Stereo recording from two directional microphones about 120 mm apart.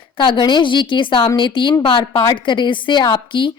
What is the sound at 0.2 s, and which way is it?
A woman's voice, 40° left (ahead or behind).